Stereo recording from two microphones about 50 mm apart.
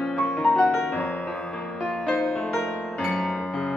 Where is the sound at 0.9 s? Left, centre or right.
Left.